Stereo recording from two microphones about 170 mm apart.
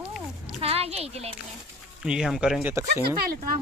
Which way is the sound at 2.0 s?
5° right (ahead or behind).